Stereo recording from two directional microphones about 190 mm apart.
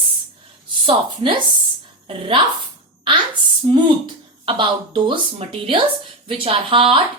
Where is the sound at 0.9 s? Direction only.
30° right (ahead or behind).